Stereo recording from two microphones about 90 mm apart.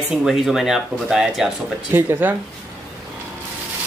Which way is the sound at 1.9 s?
25° right (ahead or behind).